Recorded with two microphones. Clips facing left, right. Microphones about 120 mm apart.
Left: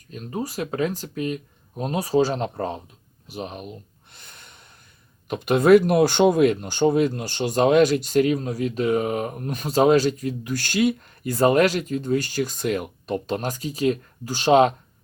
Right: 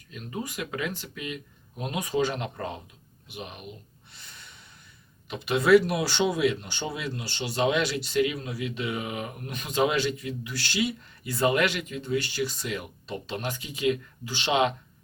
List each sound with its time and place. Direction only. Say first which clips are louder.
0.1 s speech: left 6 dB; 40° left (ahead or behind)
3.2 s gasp: left 7 dB; 40° left (ahead or behind)
5.3 s speech: left 5 dB; 50° left (ahead or behind)